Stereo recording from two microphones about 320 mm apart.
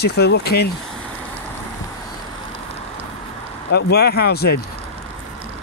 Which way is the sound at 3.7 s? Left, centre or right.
Left.